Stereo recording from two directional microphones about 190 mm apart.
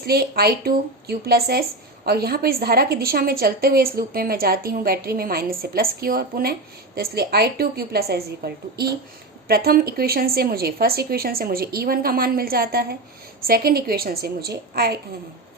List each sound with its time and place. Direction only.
0.0 s a woman's voice: 55° right (ahead or behind)